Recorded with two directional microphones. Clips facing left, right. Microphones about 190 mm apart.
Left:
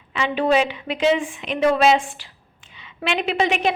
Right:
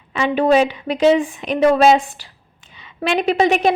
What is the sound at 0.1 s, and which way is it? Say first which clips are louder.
A woman's voice: right 4 dB; 45° right (ahead or behind).